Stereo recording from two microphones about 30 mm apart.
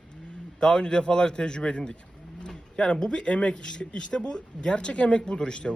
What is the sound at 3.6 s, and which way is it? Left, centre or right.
A man's voice, left.